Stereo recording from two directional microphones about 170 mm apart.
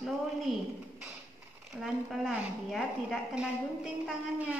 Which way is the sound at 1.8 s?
Centre (ahead or behind).